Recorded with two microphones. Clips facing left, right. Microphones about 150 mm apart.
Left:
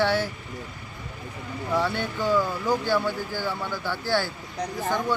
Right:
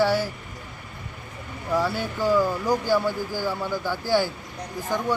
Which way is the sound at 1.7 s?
5° right (ahead or behind).